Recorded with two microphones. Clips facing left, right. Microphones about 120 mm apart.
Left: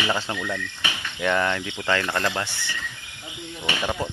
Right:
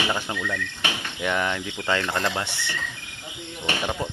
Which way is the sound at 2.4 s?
65° right (ahead or behind).